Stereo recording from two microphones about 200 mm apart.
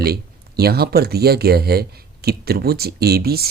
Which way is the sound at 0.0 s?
50° right (ahead or behind).